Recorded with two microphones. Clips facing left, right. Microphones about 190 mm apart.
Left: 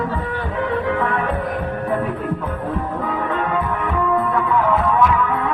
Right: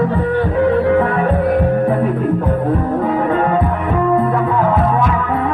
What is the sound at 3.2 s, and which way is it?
Music, 45° right (ahead or behind).